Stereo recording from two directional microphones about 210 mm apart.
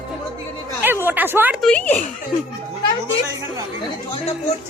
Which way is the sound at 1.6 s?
5° left (ahead or behind).